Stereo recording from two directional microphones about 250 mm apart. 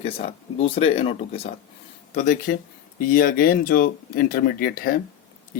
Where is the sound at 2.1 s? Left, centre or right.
Left.